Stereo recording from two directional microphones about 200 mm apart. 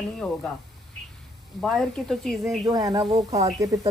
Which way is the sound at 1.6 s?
Centre (ahead or behind).